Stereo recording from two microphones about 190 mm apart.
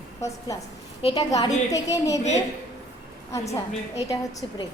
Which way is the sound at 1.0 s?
30° left (ahead or behind).